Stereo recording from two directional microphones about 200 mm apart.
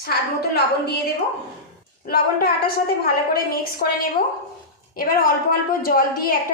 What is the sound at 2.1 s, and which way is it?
Speech, 50° left (ahead or behind).